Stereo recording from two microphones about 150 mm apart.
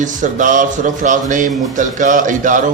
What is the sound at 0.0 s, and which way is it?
A man's voice, 55° right (ahead or behind).